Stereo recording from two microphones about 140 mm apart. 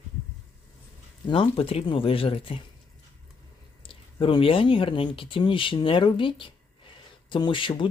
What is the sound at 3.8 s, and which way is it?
Speech, 40° left (ahead or behind).